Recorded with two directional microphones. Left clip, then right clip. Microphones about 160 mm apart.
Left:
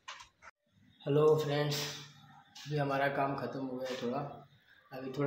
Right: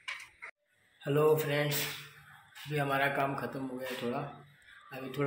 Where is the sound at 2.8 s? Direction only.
10° right (ahead or behind).